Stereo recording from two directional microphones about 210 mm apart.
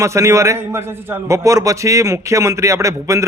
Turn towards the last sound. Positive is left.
turn(degrees=-15)  # may be behind; listen again after turning